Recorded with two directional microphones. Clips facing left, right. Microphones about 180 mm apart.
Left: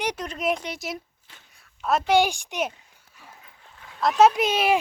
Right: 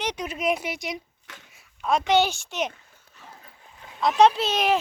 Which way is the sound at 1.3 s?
80° right.